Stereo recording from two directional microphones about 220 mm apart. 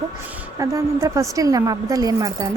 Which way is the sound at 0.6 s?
15° right (ahead or behind).